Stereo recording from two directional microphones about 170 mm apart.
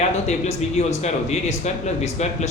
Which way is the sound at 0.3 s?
40° left (ahead or behind).